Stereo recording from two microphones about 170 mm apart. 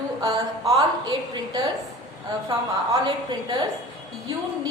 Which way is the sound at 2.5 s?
25° right (ahead or behind).